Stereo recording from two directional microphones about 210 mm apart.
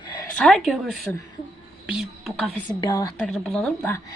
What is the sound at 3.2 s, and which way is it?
Speech, centre (ahead or behind).